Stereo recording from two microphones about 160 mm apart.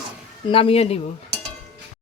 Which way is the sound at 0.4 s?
35° left (ahead or behind).